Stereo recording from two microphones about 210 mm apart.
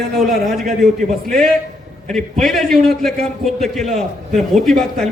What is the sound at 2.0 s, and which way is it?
A man's voice, centre (ahead or behind).